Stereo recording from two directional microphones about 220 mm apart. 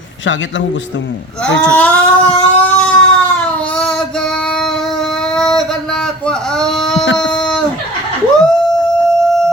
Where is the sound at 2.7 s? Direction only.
5° left (ahead or behind).